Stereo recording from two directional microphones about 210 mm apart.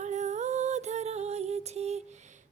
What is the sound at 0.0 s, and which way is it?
Music, 35° right (ahead or behind).